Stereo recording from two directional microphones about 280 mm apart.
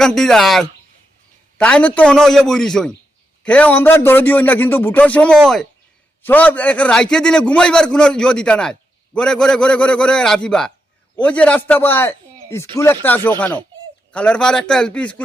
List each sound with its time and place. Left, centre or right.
0.0 s a man's voice: centre